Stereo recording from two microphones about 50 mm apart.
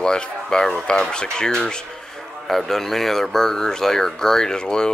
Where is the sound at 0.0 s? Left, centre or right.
Centre.